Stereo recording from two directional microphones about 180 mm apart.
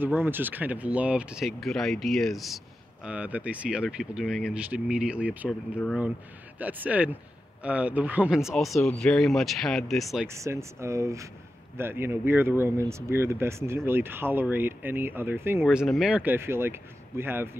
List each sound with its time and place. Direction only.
0.0 s speech: 10° right (ahead or behind)
6.6 s speech: 10° right (ahead or behind)
10.2 s speech: 15° right (ahead or behind)
15.6 s speech: centre (ahead or behind)